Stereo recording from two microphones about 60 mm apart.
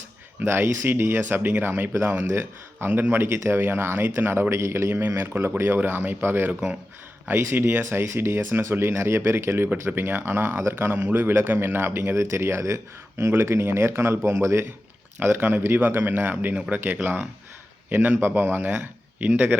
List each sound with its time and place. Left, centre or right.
0.4 s speech: right
3.3 s speech: right
12.1 s speech: right
15.2 s speech: right